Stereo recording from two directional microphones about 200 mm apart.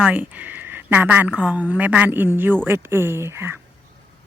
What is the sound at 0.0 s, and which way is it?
Speech, 10° right (ahead or behind).